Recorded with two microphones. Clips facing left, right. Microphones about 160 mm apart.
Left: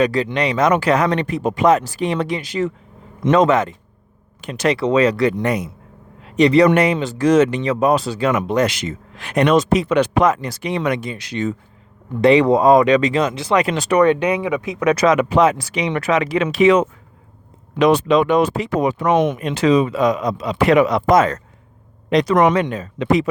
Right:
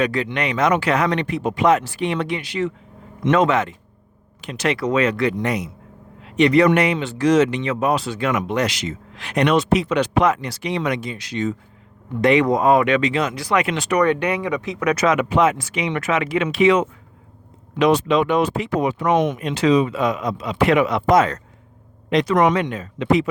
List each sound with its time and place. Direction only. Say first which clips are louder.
0.0 s speech: left 4 dB; 35° left (ahead or behind)
4.8 s speech: left 4 dB; 30° left (ahead or behind)
5.4 s speech: left 3 dB; 50° left (ahead or behind)
6.2 s a man's voice: left 2 dB; 35° left (ahead or behind)
8.6 s speech: left 3 dB; 50° left (ahead or behind)
12.2 s speech: left 4 dB; 30° left (ahead or behind)
13.3 s speech: left 3 dB; 25° left (ahead or behind)
13.6 s speech: left 3 dB; 35° left (ahead or behind)
14.0 s speech: left 4 dB; 20° left (ahead or behind)
14.9 s speech: left 3 dB; 35° left (ahead or behind)